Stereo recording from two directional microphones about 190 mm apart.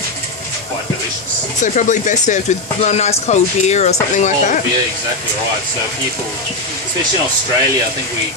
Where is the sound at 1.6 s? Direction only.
40° left (ahead or behind).